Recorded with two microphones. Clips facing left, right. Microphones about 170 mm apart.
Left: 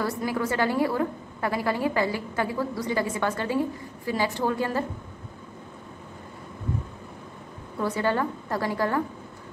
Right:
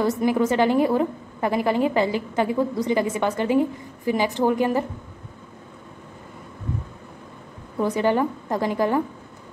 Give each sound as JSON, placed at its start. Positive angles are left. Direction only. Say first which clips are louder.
{"t": 0.0, "sound": "a woman's voice", "louder": "right 7 dB", "side_deg": -20}
{"t": 7.8, "sound": "a woman's voice", "louder": "right 5 dB", "side_deg": -15}